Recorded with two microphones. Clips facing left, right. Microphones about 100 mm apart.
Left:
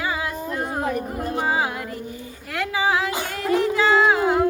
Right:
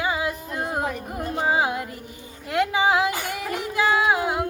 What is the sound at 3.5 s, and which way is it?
Music, 10° right (ahead or behind).